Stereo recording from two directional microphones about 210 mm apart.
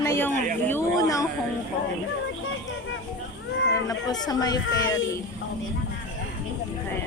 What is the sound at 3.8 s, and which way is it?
Speech, 20° left (ahead or behind).